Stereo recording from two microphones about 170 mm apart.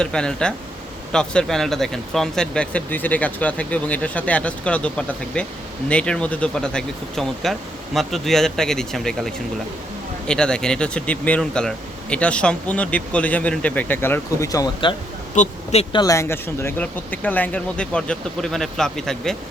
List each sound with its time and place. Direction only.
0.0 s speech: 5° left (ahead or behind); by 14.9 s 25° left (ahead or behind)
15.4 s speech: 40° left (ahead or behind)
16.0 s speech: 20° left (ahead or behind); by 19.4 s 5° left (ahead or behind)